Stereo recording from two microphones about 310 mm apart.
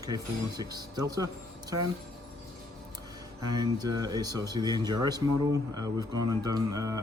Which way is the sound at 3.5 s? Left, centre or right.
Centre.